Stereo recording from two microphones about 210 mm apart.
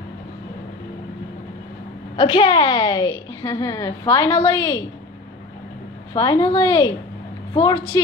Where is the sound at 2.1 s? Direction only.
25° left (ahead or behind).